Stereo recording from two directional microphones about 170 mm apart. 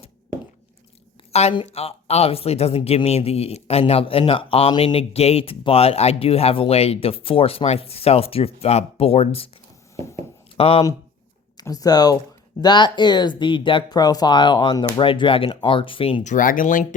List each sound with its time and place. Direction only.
1.3 s speech: 40° left (ahead or behind)
10.6 s speech: 35° left (ahead or behind)
11.5 s speech: 20° left (ahead or behind)
16.2 s speech: 50° left (ahead or behind)